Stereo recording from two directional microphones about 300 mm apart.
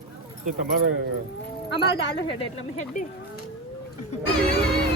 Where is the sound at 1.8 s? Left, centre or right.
Left.